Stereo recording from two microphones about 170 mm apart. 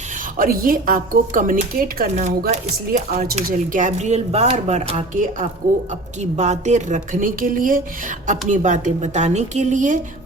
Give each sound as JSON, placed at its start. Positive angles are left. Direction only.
{"t": 0.3, "sound": "speech", "side_deg": -60}